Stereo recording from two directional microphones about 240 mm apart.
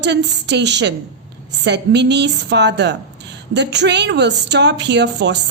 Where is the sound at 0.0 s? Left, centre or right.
Right.